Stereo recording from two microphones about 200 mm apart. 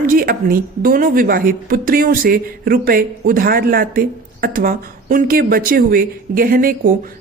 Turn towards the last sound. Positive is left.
turn(degrees=-45)  # may be behind; listen again after turning